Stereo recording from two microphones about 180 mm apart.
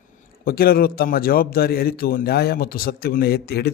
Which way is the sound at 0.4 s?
55° left (ahead or behind).